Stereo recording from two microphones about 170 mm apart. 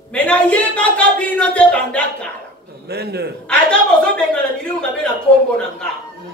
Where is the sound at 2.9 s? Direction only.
70° right (ahead or behind).